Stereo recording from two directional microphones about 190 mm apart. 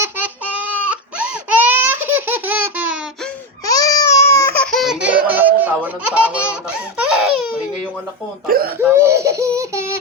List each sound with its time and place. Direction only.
0.0 s baby cry: 10° right (ahead or behind)
3.7 s baby cry: 20° left (ahead or behind)
4.5 s baby laughter: 5° left (ahead or behind)
8.4 s a sound: 50° right (ahead or behind)
8.8 s baby laughter: 15° right (ahead or behind)